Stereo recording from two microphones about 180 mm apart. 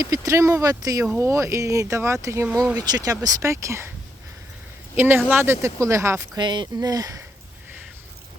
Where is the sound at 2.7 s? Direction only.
20° right (ahead or behind).